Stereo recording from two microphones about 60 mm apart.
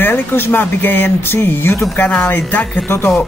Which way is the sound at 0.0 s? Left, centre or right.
Left.